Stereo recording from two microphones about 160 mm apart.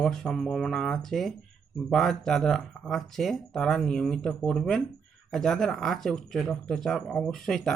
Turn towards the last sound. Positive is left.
turn(degrees=0)  # may be behind; listen again after turning